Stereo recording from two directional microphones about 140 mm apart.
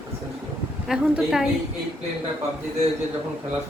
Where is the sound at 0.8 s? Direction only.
5° right (ahead or behind).